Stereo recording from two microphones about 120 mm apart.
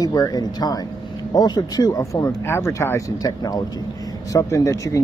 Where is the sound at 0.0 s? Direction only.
30° left (ahead or behind).